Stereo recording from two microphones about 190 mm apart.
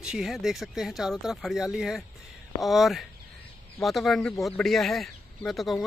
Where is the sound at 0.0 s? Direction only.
Centre (ahead or behind).